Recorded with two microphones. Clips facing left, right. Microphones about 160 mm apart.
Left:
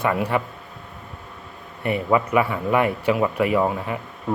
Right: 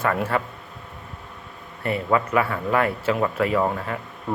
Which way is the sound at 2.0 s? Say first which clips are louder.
Left 2 dB; 15° left (ahead or behind).